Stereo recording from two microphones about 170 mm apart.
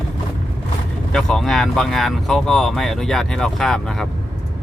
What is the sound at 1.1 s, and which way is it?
Speech, centre (ahead or behind).